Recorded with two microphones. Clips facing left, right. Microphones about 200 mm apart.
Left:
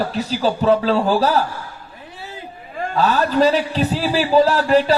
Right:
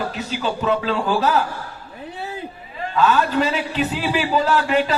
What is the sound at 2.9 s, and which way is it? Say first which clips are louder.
A man's voice: left 1 dB; 35° left (ahead or behind).